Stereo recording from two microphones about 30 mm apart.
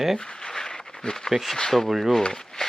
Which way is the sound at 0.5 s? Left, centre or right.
Left.